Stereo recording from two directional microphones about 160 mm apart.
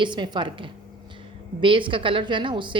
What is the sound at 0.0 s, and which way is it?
A woman's voice, 30° right (ahead or behind).